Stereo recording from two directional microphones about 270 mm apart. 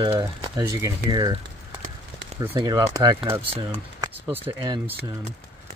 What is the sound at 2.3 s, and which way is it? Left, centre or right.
Speech, centre.